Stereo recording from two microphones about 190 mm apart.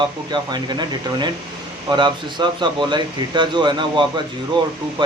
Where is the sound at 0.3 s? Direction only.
20° right (ahead or behind).